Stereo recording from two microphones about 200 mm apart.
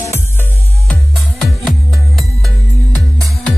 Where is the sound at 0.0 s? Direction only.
10° left (ahead or behind).